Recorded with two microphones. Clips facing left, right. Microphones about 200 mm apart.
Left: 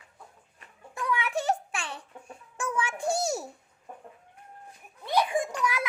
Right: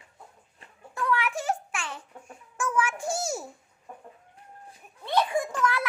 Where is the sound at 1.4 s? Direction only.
65° left (ahead or behind).